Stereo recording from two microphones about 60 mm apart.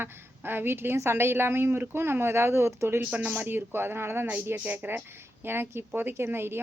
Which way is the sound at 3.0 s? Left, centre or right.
Right.